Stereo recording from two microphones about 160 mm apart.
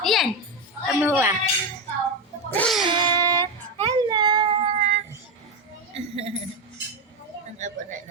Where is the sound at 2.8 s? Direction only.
30° right (ahead or behind).